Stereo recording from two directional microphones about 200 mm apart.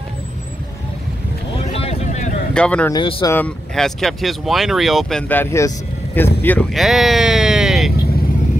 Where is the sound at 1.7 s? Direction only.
30° left (ahead or behind).